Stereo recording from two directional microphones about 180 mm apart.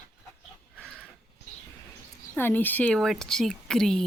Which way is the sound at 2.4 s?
10° left (ahead or behind).